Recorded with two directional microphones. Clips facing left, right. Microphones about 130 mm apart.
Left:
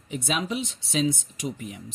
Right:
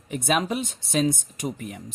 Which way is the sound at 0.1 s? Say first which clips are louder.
Right 4 dB; 50° right (ahead or behind).